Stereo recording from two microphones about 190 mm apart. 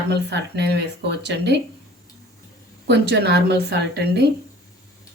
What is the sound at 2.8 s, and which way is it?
Speech, 65° right (ahead or behind).